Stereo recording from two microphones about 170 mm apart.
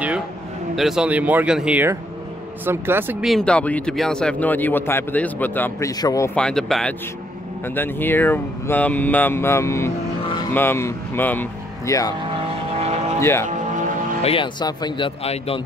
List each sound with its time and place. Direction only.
0.7 s speech: centre (ahead or behind)
3.3 s speech: 5° left (ahead or behind); by 6.3 s 20° left (ahead or behind)
6.3 s speech: 5° left (ahead or behind)
10.2 s vehicle: 25° left (ahead or behind)
10.5 s speech: 15° left (ahead or behind)
12.2 s vehicle: 35° right (ahead or behind)
13.2 s speech: 15° left (ahead or behind)
14.2 s speech: 30° left (ahead or behind)